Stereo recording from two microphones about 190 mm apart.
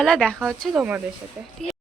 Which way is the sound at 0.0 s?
5° left (ahead or behind).